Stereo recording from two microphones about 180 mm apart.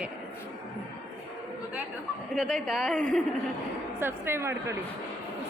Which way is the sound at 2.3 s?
Centre (ahead or behind).